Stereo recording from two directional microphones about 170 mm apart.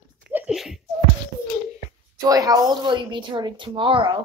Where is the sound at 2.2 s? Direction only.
20° right (ahead or behind).